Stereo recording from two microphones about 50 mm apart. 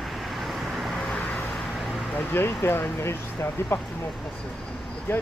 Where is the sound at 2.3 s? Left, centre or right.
Left.